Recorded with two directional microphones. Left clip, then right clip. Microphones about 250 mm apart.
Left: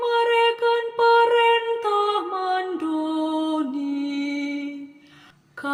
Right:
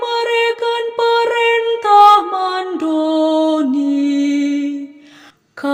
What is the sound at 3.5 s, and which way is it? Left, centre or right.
Mantra, right.